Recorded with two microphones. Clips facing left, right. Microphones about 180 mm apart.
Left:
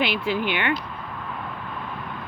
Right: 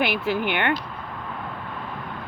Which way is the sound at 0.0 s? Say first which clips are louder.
Right 1 dB; 50° right (ahead or behind).